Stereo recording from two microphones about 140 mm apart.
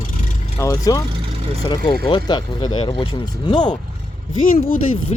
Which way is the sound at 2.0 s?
35° left (ahead or behind).